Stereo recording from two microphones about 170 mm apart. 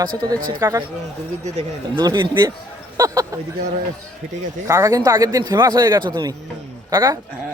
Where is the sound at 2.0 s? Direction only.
25° right (ahead or behind).